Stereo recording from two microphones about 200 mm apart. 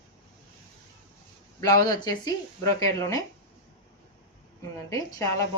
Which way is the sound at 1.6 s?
20° left (ahead or behind).